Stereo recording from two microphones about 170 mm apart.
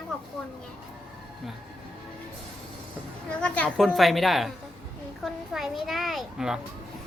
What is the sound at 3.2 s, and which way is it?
A child's voice, 5° left (ahead or behind).